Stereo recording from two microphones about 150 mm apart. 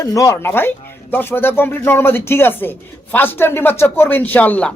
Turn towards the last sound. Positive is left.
turn(degrees=10)  # may be behind; listen again after turning